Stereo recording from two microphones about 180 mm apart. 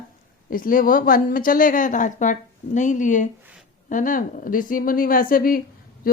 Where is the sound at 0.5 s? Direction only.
50° left (ahead or behind).